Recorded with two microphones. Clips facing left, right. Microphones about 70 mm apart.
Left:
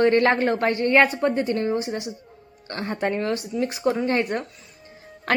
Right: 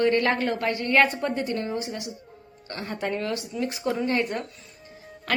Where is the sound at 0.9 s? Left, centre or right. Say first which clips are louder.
Left 2 dB; left.